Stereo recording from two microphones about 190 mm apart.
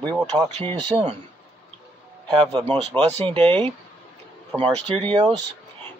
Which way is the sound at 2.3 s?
25° right (ahead or behind).